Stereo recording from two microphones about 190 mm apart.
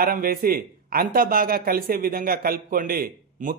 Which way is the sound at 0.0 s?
50° right (ahead or behind).